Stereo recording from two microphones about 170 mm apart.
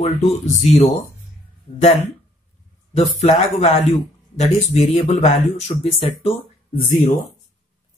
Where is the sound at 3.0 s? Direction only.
40° left (ahead or behind).